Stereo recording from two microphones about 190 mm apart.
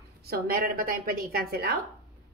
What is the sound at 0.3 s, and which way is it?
Speech, 50° right (ahead or behind).